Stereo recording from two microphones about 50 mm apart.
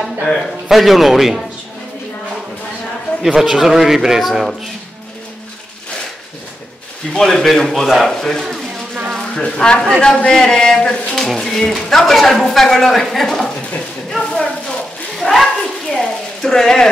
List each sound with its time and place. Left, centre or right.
0.0 s speech: centre
0.7 s speech: centre
3.3 s speech: centre
7.1 s a man's voice: centre
14.1 s a sound: centre